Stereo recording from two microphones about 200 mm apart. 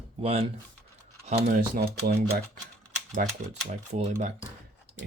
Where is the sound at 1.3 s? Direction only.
50° right (ahead or behind).